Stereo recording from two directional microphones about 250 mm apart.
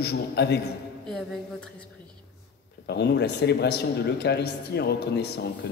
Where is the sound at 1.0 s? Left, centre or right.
Centre.